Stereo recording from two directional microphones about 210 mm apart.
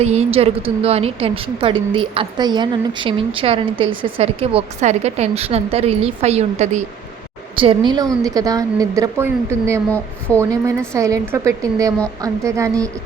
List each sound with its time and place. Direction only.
0.0 s a woman's voice: 30° right (ahead or behind); by 9.8 s 15° right (ahead or behind)
9.9 s a woman's voice: 10° left (ahead or behind)
10.5 s a woman's voice: 15° right (ahead or behind)